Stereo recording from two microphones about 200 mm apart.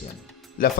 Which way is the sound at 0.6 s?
45° left (ahead or behind).